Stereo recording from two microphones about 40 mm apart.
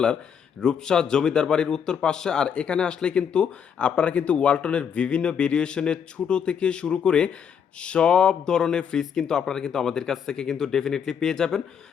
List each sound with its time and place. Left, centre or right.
0.6 s speech: centre